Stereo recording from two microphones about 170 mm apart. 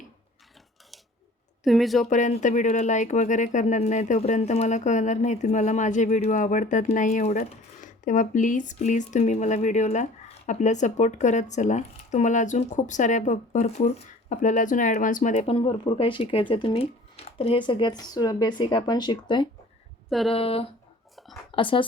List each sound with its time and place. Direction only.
1.6 s speech: centre (ahead or behind)
2.0 s speech: 45° left (ahead or behind); by 19.5 s 25° left (ahead or behind)
20.1 s a sound: centre (ahead or behind)
20.3 s speech: 35° left (ahead or behind)